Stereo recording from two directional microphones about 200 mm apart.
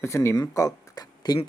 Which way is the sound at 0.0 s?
15° left (ahead or behind).